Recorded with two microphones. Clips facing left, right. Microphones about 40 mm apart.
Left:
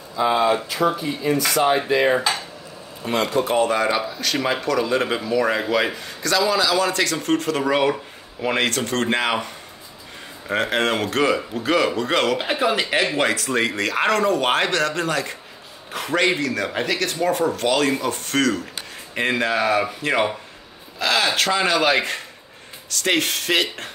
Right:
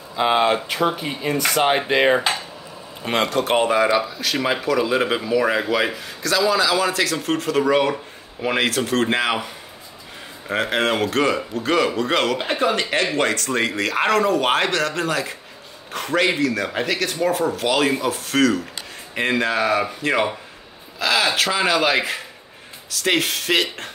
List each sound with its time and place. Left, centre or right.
0.1 s speech: right
3.3 s speech: right
3.6 s speech: centre